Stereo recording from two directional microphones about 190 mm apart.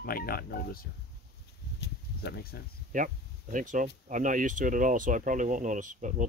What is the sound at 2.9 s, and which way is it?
Speech, 45° right (ahead or behind).